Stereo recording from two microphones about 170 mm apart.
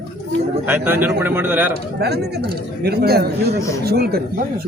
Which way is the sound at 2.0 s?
75° right (ahead or behind).